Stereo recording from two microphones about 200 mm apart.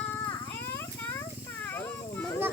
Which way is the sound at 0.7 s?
10° left (ahead or behind).